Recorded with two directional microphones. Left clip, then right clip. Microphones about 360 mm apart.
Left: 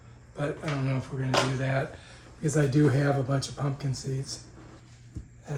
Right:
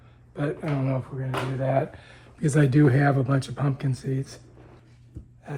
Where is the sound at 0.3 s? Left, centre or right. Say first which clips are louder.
Right 3 dB; right.